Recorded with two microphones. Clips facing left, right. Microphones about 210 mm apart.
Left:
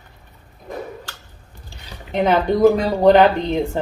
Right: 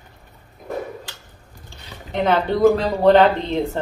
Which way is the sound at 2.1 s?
15° left (ahead or behind).